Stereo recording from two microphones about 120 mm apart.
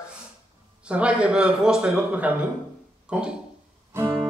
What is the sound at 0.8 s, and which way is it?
A man's voice, 10° right (ahead or behind).